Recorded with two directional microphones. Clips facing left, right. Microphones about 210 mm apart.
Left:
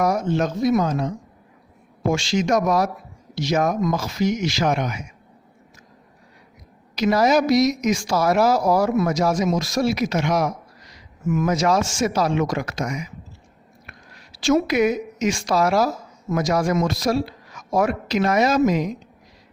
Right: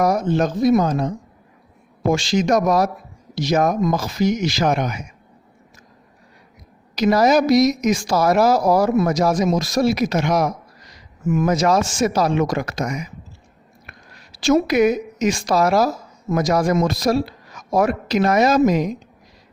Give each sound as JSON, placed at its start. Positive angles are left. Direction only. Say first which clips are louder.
{"t": 0.0, "sound": "a woman's voice", "louder": "right 3 dB", "side_deg": -35}
{"t": 6.9, "sound": "a woman's voice", "louder": "right 2 dB", "side_deg": -40}
{"t": 14.4, "sound": "a woman's voice", "louder": "right 3 dB", "side_deg": -40}